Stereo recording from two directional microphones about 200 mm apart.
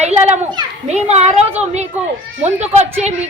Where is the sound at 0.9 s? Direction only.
35° right (ahead or behind).